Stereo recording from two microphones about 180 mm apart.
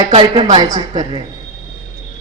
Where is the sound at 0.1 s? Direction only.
30° right (ahead or behind).